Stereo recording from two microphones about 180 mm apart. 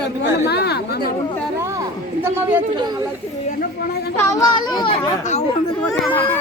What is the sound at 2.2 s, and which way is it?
Speech, 10° right (ahead or behind).